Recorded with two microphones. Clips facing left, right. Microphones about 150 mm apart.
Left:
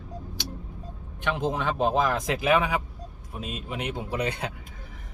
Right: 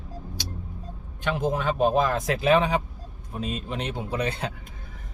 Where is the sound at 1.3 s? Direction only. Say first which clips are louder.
Right 3 dB; 20° left (ahead or behind).